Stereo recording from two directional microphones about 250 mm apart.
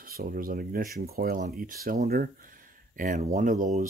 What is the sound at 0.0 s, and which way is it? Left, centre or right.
Speech, right.